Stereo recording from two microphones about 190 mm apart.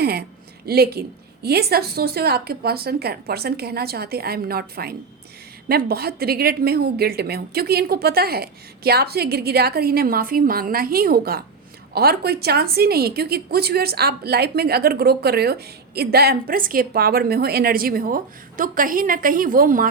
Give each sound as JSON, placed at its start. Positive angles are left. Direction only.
{"t": 0.0, "sound": "a woman's voice", "side_deg": -55}